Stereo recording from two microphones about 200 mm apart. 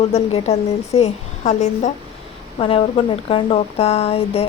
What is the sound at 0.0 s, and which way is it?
A woman's voice, 30° left (ahead or behind).